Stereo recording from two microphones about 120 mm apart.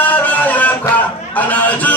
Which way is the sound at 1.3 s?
15° left (ahead or behind).